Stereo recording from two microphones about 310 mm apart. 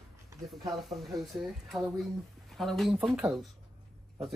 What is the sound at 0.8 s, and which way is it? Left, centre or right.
Speech, centre.